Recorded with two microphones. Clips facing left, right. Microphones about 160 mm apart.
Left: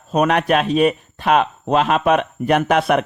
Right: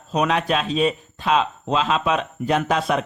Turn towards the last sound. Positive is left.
turn(degrees=65)  # may be behind; listen again after turning